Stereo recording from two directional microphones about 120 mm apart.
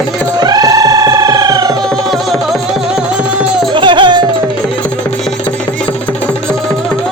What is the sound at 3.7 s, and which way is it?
Music, 40° right (ahead or behind).